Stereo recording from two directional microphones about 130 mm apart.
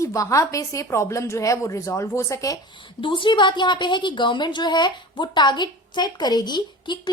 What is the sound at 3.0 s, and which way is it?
A woman's voice, 40° left (ahead or behind).